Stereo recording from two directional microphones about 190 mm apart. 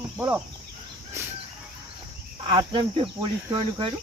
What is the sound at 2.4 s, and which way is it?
Speech, 25° right (ahead or behind).